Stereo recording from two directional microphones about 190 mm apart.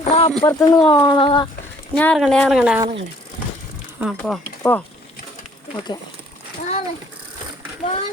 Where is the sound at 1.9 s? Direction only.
5° left (ahead or behind).